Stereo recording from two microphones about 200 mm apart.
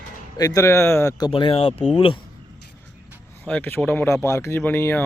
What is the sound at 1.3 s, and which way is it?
Speech, 25° left (ahead or behind).